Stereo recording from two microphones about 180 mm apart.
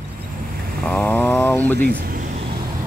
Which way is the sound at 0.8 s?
5° left (ahead or behind).